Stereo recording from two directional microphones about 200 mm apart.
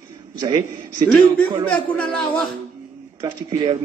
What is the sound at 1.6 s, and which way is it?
Speech, 5° left (ahead or behind).